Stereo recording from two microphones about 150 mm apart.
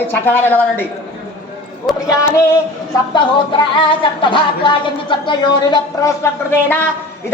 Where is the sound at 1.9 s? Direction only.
Centre (ahead or behind).